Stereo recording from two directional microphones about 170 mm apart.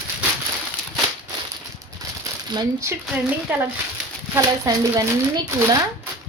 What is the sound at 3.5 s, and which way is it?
A woman's voice, 10° right (ahead or behind).